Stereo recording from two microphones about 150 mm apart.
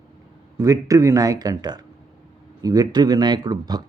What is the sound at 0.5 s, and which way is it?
Speech, 20° right (ahead or behind).